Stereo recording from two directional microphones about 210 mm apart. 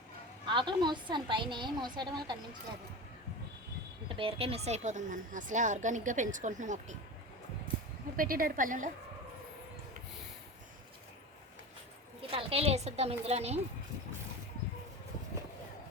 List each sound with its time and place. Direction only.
0.4 s a woman's voice: 20° right (ahead or behind)
4.1 s a woman's voice: 25° right (ahead or behind)
8.1 s a woman's voice: 40° right (ahead or behind)
12.3 s a woman's voice: 25° right (ahead or behind)